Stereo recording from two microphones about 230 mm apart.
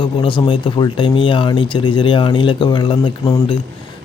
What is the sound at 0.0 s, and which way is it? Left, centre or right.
Speech, left.